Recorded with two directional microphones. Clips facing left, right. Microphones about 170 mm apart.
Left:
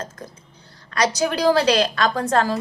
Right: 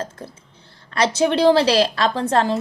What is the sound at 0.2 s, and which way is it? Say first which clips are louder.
A woman's voice: right 2 dB; 30° right (ahead or behind).